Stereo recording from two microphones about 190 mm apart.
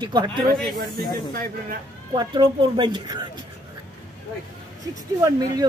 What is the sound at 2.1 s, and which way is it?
Speech, 20° right (ahead or behind).